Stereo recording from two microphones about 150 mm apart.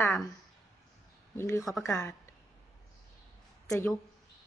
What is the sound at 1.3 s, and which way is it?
Speech, 20° left (ahead or behind).